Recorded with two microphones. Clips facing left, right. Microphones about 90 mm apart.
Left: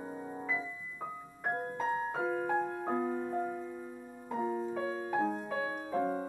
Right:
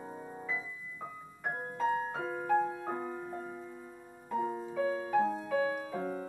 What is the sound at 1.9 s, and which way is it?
Music, 15° left (ahead or behind).